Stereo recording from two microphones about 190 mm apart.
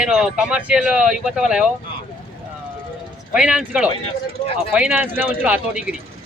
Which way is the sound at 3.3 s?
5° right (ahead or behind).